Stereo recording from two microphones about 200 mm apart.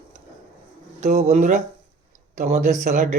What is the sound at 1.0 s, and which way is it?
Speech, 35° right (ahead or behind).